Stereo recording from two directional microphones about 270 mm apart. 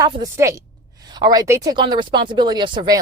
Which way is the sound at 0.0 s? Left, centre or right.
Centre.